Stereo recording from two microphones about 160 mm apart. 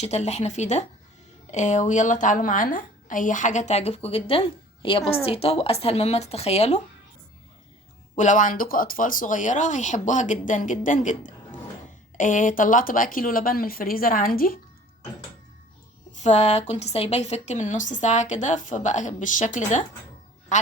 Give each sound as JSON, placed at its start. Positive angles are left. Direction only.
{"t": 0.0, "sound": "a woman's voice", "side_deg": 45}
{"t": 8.1, "sound": "a woman's voice", "side_deg": 50}
{"t": 16.1, "sound": "a woman's voice", "side_deg": 45}